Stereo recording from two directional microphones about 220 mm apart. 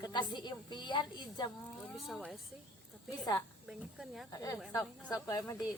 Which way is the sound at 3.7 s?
Centre (ahead or behind).